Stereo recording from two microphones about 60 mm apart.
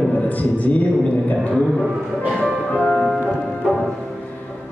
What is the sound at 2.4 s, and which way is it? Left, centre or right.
Music, centre.